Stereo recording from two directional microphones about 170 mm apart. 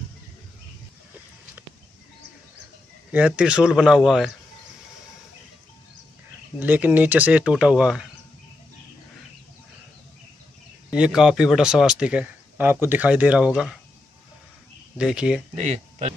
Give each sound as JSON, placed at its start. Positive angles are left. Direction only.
{"t": 3.1, "sound": "speech", "side_deg": -10}
{"t": 6.6, "sound": "speech", "side_deg": -10}
{"t": 10.9, "sound": "speech", "side_deg": -5}
{"t": 15.0, "sound": "speech", "side_deg": -5}
{"t": 15.5, "sound": "speech", "side_deg": -45}